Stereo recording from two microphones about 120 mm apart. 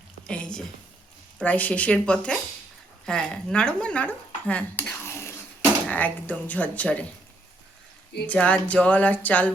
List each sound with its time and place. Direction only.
0.3 s speech: 10° left (ahead or behind)
8.3 s speech: 10° left (ahead or behind)